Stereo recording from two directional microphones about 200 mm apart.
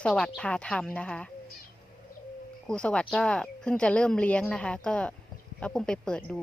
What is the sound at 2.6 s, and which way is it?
A woman's voice, 5° left (ahead or behind).